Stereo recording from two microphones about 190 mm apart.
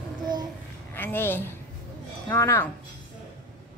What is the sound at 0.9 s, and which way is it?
A woman's voice, 10° left (ahead or behind).